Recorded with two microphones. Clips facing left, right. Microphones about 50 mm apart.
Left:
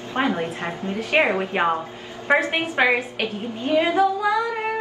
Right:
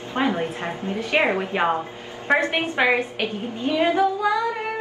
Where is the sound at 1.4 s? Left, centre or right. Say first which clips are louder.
Even; left.